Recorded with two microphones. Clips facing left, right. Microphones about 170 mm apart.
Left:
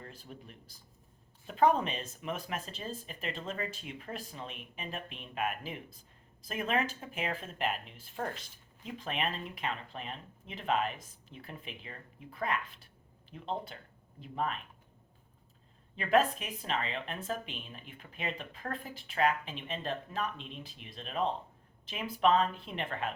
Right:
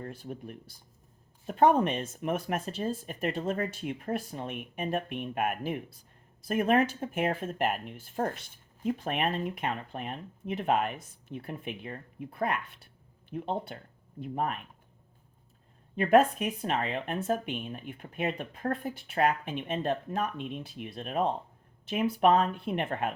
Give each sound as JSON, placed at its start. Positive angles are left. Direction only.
{"t": 0.0, "sound": "speech", "side_deg": -50}
{"t": 13.3, "sound": "speech", "side_deg": -55}
{"t": 16.0, "sound": "speech", "side_deg": -50}